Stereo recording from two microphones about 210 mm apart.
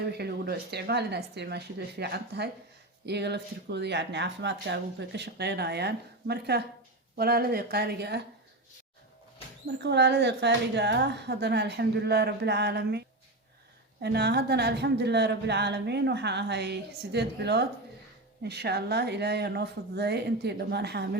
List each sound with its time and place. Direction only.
0.1 s a woman's voice: 50° right (ahead or behind)
9.8 s a woman's voice: 55° right (ahead or behind)